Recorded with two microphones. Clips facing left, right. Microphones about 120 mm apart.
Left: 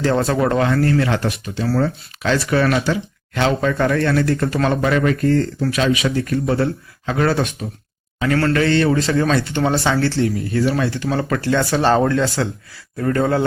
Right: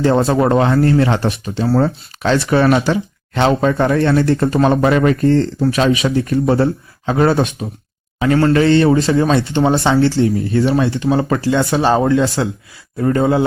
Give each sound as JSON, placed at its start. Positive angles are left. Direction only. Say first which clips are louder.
{"t": 0.0, "sound": "speech", "louder": "right 4 dB", "side_deg": -25}